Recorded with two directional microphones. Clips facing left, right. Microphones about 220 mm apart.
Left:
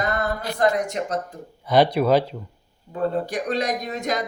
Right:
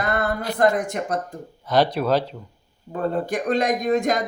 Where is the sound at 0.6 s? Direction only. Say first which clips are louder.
Right 2 dB; 50° right (ahead or behind).